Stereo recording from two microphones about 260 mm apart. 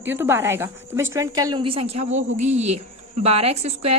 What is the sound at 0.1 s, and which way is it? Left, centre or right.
A woman's voice, centre.